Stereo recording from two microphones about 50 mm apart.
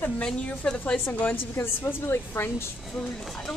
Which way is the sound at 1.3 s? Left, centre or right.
Left.